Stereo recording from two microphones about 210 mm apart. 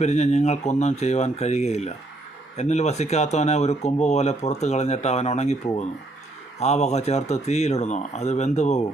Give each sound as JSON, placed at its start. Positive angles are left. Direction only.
{"t": 0.0, "sound": "speech", "side_deg": 30}